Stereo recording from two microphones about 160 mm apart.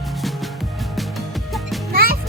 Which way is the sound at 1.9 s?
70° right (ahead or behind).